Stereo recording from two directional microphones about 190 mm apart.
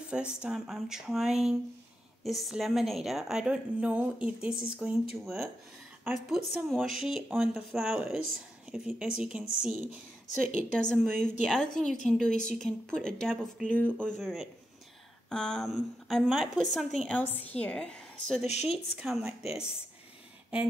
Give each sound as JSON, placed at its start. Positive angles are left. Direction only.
{"t": 0.1, "sound": "a woman's voice", "side_deg": -5}
{"t": 18.4, "sound": "speech", "side_deg": 35}
{"t": 18.7, "sound": "a woman's voice", "side_deg": 0}